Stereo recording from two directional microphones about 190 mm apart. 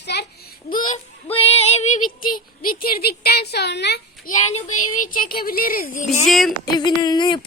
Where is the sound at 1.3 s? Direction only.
30° left (ahead or behind); by 4.0 s 65° left (ahead or behind).